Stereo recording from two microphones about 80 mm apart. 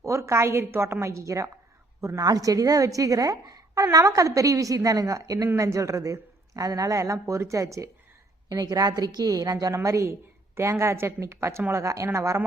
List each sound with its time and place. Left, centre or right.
0.0 s a woman's voice: right
8.4 s a woman's voice: right